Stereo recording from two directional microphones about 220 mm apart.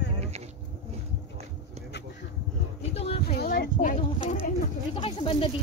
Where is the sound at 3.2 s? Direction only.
45° left (ahead or behind); by 5.4 s 25° left (ahead or behind).